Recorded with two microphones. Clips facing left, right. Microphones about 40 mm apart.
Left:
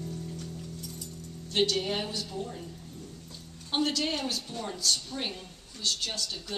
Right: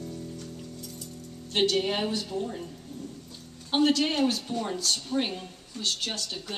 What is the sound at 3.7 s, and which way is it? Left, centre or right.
A woman's voice, centre.